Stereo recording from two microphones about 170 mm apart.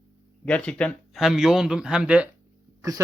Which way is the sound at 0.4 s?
5° left (ahead or behind).